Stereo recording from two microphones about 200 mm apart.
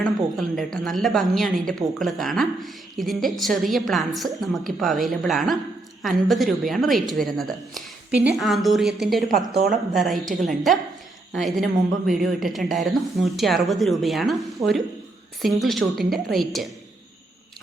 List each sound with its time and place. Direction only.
0.0 s a woman's voice: centre (ahead or behind)